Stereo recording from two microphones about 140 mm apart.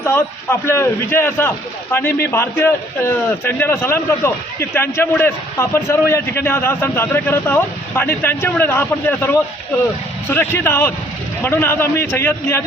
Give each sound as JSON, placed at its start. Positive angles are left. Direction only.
{"t": 0.0, "sound": "a man's voice", "side_deg": 15}